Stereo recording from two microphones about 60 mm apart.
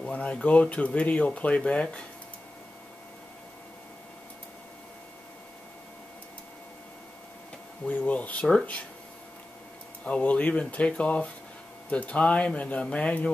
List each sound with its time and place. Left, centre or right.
0.0 s a sound: left
0.3 s speech: centre
7.8 s speech: left
10.0 s speech: centre